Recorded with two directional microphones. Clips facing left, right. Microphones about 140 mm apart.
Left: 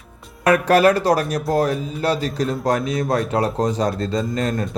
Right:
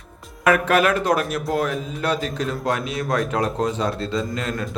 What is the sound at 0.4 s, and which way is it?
A man's voice, 35° left (ahead or behind).